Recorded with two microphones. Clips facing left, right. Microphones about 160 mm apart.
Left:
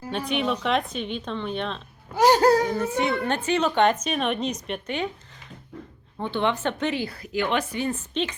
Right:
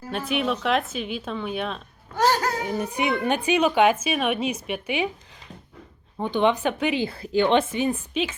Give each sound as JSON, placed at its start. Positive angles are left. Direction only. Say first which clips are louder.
{"t": 0.1, "sound": "speech", "louder": "even", "side_deg": -5}
{"t": 2.1, "sound": "a sound", "louder": "left 3 dB", "side_deg": 15}
{"t": 2.4, "sound": "speech", "louder": "left 9 dB", "side_deg": 35}
{"t": 2.7, "sound": "a woman's voice", "louder": "left 1 dB", "side_deg": -15}
{"t": 6.1, "sound": "a woman's voice", "louder": "right 4 dB", "side_deg": -15}
{"t": 7.0, "sound": "a woman's voice", "louder": "right 5 dB", "side_deg": -25}